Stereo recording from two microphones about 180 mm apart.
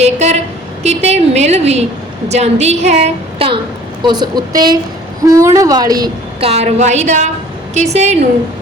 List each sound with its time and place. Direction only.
0.0 s a woman's voice: 40° right (ahead or behind); by 6.1 s 20° right (ahead or behind)
6.4 s a woman's voice: 35° right (ahead or behind)